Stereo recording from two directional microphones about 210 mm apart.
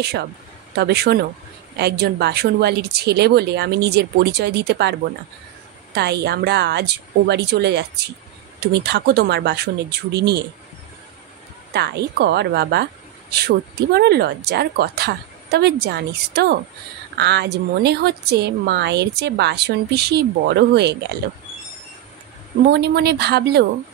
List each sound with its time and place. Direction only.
0.7 s speech: 50° right (ahead or behind)
5.9 s speech: 50° right (ahead or behind)
11.7 s speech: 50° right (ahead or behind)
22.7 s speech: 50° right (ahead or behind)